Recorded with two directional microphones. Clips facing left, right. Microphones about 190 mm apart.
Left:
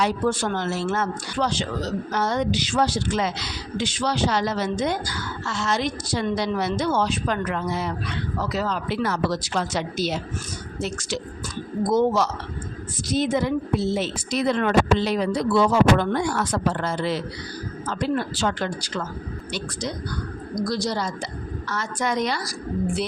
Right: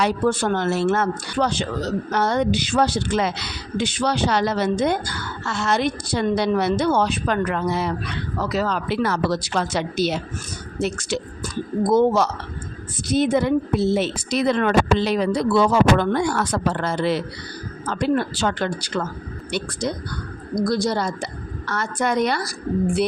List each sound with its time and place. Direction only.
0.0 s speech: 60° right (ahead or behind)
20.7 s speech: 55° right (ahead or behind)